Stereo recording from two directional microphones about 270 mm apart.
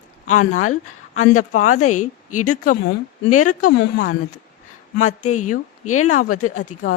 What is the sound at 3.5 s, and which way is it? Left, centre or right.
Speech, left.